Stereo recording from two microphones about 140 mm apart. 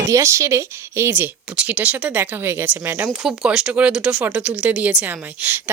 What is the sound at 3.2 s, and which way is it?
Speech, 5° right (ahead or behind).